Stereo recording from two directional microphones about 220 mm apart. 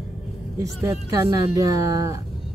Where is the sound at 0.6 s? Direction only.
15° right (ahead or behind).